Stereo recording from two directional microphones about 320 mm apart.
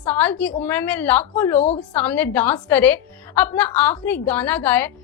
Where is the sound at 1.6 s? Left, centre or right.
Centre.